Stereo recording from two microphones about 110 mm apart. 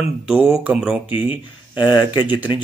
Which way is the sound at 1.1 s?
55° left (ahead or behind).